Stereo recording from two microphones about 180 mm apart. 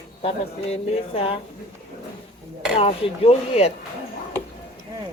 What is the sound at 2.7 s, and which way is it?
Speech, 30° left (ahead or behind).